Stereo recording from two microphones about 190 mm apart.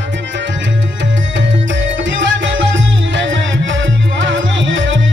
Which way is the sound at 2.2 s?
75° right (ahead or behind).